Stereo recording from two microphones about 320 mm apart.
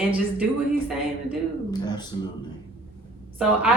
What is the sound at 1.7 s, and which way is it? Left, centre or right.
Speech, centre.